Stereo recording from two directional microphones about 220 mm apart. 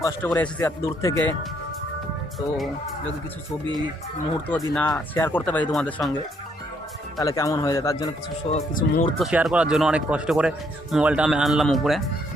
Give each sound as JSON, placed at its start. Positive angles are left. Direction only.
{"t": 0.0, "sound": "speech", "side_deg": 10}
{"t": 4.4, "sound": "speech", "side_deg": 15}
{"t": 7.2, "sound": "speech", "side_deg": 15}
{"t": 8.4, "sound": "speech", "side_deg": 35}
{"t": 9.1, "sound": "speech", "side_deg": 0}